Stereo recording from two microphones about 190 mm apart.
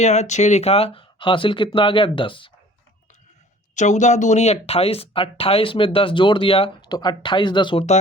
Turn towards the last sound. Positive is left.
turn(degrees=35)  # may be behind; listen again after turning